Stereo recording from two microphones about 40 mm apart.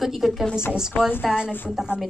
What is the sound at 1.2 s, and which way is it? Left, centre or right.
Speech, right.